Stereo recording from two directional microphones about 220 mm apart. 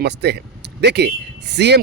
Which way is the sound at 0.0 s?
50° right (ahead or behind).